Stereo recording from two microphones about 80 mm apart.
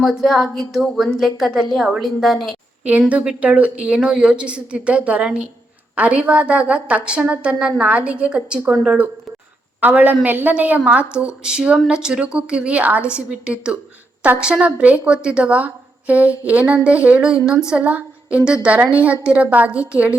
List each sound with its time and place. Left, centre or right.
0.0 s a woman's voice: centre
3.1 s a woman's voice: centre